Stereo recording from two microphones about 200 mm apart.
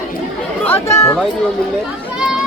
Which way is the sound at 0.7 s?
10° left (ahead or behind).